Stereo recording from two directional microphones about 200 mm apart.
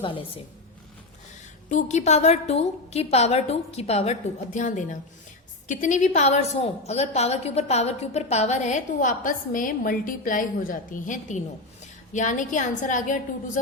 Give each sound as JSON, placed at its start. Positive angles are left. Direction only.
{"t": 0.0, "sound": "a woman's voice", "side_deg": 25}
{"t": 1.7, "sound": "a woman's voice", "side_deg": 35}